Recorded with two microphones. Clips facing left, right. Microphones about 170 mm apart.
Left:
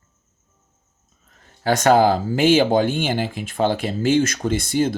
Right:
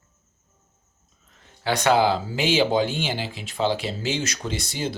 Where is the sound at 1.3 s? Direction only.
45° left (ahead or behind).